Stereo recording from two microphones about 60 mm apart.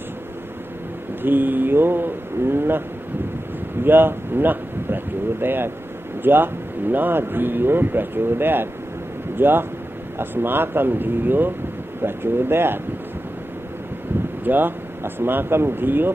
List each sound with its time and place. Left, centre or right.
1.2 s speech: right
3.8 s speech: right
14.4 s speech: right